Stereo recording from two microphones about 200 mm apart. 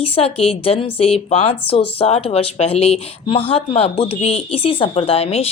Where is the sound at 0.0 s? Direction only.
30° left (ahead or behind).